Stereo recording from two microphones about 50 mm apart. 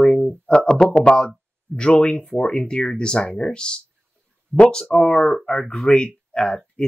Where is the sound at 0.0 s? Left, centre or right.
Centre.